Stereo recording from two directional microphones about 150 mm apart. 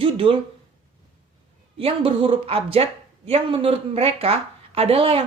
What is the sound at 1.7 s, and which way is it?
A woman's voice, 40° right (ahead or behind).